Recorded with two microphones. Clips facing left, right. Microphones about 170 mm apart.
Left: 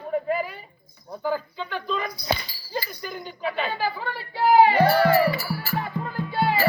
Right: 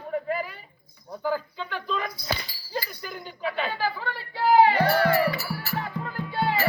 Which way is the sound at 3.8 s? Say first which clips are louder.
Left 1 dB; 15° left (ahead or behind).